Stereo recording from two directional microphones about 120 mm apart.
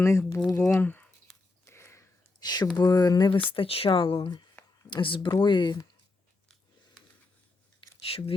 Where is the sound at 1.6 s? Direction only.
20° left (ahead or behind).